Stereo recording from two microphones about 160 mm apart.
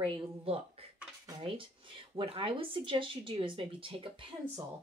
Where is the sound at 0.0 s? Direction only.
35° right (ahead or behind).